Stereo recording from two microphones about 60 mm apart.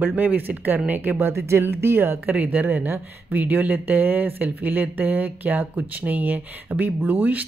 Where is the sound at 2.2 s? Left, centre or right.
Right.